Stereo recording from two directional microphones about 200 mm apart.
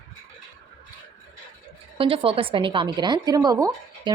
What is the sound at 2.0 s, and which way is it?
A woman's voice, 30° right (ahead or behind).